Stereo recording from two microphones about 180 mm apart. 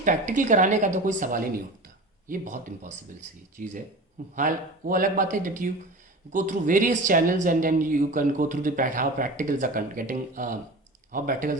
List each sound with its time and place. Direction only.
0.0 s speech: 45° right (ahead or behind)